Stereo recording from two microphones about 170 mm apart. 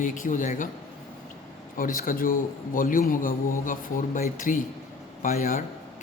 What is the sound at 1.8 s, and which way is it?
Speech, 55° left (ahead or behind).